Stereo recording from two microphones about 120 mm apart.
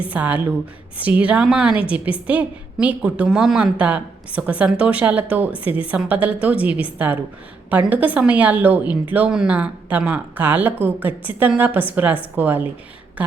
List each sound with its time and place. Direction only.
0.1 s a woman's voice: 15° right (ahead or behind)